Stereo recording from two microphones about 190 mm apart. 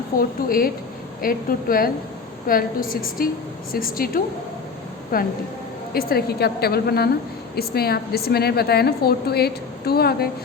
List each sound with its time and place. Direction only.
0.2 s a woman's voice: 50° left (ahead or behind)